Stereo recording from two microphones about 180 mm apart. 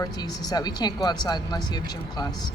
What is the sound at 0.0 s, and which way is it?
Speech, 20° left (ahead or behind).